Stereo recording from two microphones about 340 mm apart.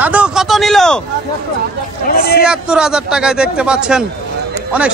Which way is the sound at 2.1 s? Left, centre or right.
Left.